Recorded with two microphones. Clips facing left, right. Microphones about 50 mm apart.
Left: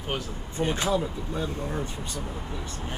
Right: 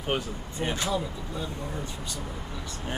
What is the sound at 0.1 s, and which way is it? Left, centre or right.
Speech, right.